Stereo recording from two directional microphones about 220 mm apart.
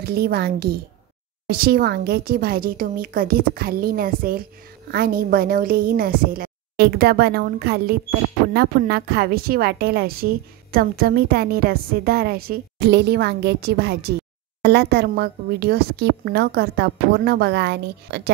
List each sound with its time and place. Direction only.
0.0 s a woman's voice: 45° right (ahead or behind)